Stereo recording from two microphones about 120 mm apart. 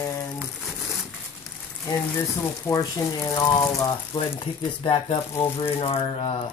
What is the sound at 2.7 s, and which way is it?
Speech, 30° left (ahead or behind).